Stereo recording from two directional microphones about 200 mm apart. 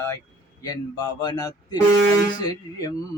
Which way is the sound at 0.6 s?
20° left (ahead or behind).